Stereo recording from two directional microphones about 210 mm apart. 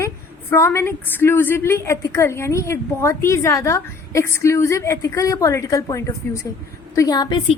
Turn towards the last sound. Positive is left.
turn(degrees=20)  # may be behind; listen again after turning